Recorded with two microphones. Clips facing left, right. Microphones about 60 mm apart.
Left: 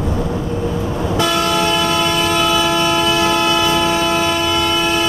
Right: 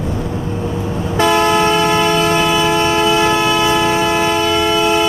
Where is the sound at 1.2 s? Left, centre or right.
Right.